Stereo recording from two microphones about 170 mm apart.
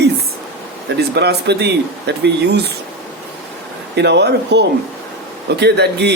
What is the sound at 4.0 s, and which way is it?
A man's voice, 90° right.